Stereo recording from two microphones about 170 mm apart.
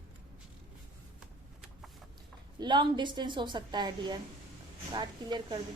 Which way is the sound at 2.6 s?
25° right (ahead or behind).